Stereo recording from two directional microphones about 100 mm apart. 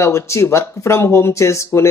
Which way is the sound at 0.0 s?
30° left (ahead or behind).